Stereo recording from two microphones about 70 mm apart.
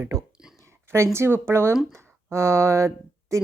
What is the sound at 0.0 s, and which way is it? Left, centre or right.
A woman's voice, right.